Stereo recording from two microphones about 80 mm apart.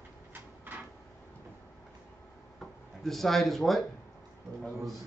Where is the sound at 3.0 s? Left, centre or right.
Centre.